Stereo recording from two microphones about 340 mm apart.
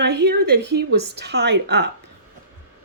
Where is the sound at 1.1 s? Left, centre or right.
Right.